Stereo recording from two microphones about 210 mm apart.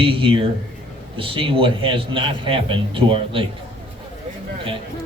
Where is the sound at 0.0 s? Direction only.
25° right (ahead or behind).